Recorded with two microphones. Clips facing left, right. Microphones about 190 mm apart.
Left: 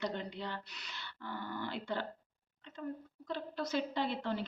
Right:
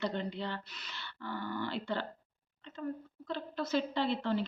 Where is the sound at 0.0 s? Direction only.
10° left (ahead or behind).